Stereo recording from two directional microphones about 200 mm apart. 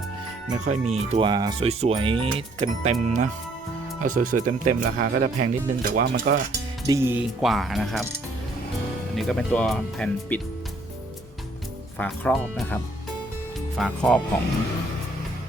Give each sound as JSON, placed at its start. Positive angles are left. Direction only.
{"t": 0.6, "sound": "speech", "side_deg": -35}
{"t": 1.3, "sound": "speech", "side_deg": -20}
{"t": 6.8, "sound": "speech", "side_deg": -15}
{"t": 7.4, "sound": "speech", "side_deg": 0}
{"t": 9.1, "sound": "speech", "side_deg": 0}
{"t": 11.9, "sound": "speech", "side_deg": 5}